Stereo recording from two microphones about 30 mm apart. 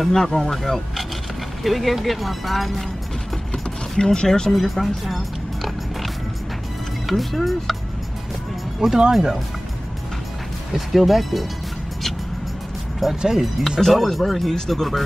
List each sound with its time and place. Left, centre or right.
0.0 s speech: centre
1.6 s speech: centre
3.5 s mechanisms: centre
4.5 s speech: centre
7.1 s speech: centre
8.8 s speech: right
10.7 s speech: centre
13.1 s speech: centre
13.9 s speech: centre